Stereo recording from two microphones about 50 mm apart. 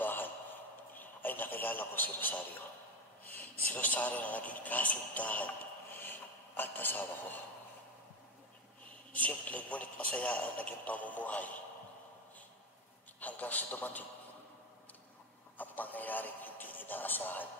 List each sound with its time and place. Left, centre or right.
0.0 s a sound: left
3.6 s speech: left
5.9 s a sound: left
9.1 s a man's voice: left
13.2 s speech: left
15.5 s speech: left